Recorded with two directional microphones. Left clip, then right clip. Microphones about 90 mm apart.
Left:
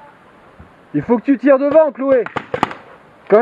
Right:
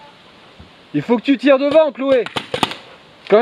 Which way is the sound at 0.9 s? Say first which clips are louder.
Left 1 dB; 15° right (ahead or behind).